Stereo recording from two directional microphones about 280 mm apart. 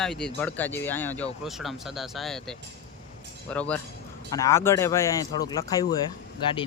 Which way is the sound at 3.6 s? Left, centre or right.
Centre.